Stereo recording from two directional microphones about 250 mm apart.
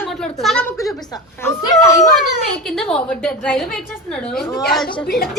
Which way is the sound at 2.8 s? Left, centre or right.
Centre.